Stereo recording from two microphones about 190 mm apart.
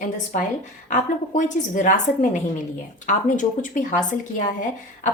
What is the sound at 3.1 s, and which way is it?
Speech, 40° left (ahead or behind).